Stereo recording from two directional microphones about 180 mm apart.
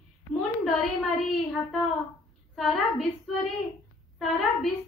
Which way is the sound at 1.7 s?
Centre (ahead or behind).